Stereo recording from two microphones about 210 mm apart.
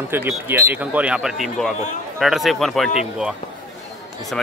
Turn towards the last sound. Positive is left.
turn(degrees=-5)  # may be behind; listen again after turning